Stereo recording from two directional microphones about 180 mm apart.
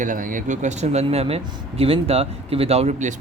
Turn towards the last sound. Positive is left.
turn(degrees=-40)  # may be behind; listen again after turning